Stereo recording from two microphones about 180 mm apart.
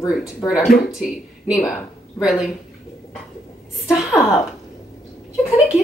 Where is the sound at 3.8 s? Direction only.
Centre (ahead or behind).